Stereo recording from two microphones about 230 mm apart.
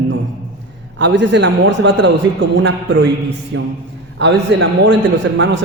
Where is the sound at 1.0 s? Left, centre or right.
Right.